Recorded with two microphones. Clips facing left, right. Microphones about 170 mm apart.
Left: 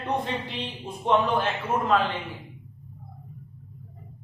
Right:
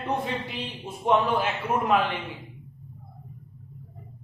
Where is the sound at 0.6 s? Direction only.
5° right (ahead or behind).